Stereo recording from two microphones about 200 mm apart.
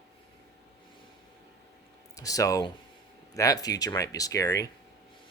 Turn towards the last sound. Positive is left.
turn(degrees=15)  # may be behind; listen again after turning